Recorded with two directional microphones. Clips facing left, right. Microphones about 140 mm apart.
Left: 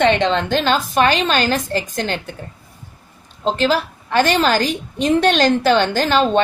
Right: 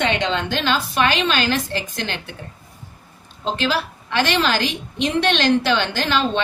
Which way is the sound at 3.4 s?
40° left (ahead or behind).